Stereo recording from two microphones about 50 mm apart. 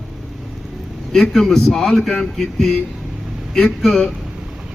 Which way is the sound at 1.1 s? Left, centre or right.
Centre.